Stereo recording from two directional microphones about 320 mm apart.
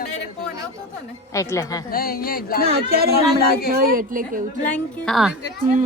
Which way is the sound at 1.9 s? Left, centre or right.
Left.